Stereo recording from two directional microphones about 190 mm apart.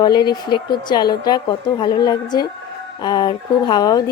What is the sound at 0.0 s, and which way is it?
Speech, 20° left (ahead or behind).